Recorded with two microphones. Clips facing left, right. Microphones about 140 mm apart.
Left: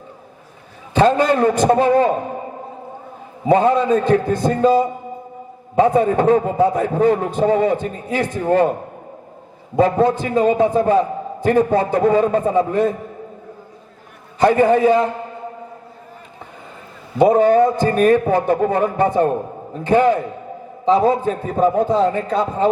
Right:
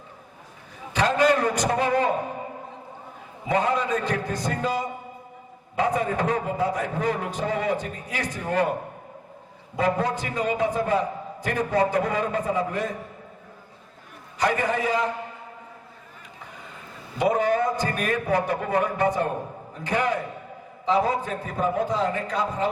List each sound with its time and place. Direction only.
0.9 s a man's voice: 30° left (ahead or behind)
3.4 s a man's voice: 30° left (ahead or behind)
9.7 s a man's voice: 25° left (ahead or behind)
14.3 s a man's voice: 25° left (ahead or behind)
17.2 s a man's voice: 25° left (ahead or behind)